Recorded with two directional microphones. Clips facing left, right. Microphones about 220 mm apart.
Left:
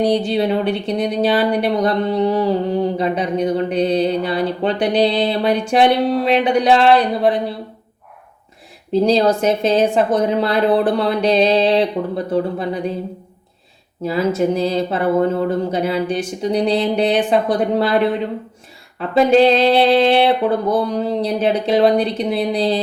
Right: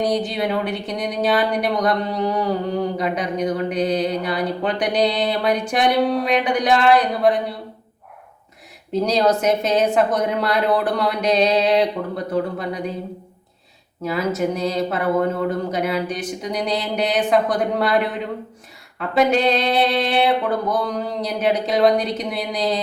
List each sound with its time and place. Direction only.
0.0 s speech: 30° left (ahead or behind)
8.9 s speech: 30° left (ahead or behind)
14.0 s speech: 30° left (ahead or behind)